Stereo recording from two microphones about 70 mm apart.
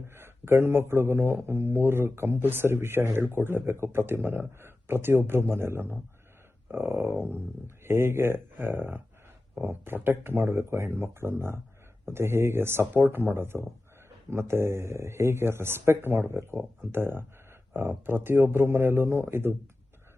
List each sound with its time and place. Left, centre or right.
0.1 s a man's voice: right
6.7 s a sound: right
7.9 s a man's voice: right